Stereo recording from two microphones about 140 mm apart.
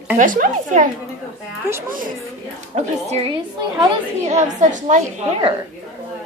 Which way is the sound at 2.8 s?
50° right (ahead or behind).